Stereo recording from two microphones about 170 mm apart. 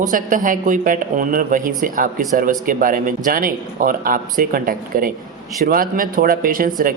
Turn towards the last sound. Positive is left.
turn(degrees=-55)  # may be behind; listen again after turning